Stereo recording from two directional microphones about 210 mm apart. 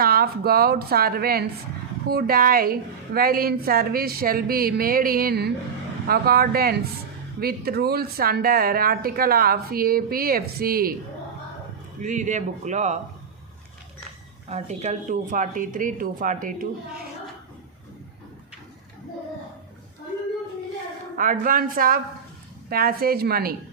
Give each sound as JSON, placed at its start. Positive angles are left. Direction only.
{"t": 0.0, "sound": "speech", "side_deg": -45}
{"t": 12.0, "sound": "speech", "side_deg": -35}
{"t": 14.5, "sound": "speech", "side_deg": -30}
{"t": 21.2, "sound": "speech", "side_deg": -40}